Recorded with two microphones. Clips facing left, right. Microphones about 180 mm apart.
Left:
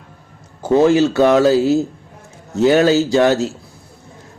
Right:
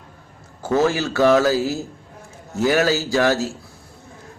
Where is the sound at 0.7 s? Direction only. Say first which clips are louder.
Left 7 dB; 20° left (ahead or behind).